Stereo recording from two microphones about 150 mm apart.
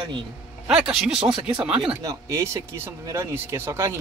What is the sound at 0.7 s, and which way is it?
Speech, 5° right (ahead or behind).